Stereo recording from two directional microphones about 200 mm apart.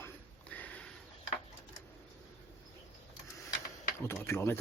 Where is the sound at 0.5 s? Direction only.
5° left (ahead or behind).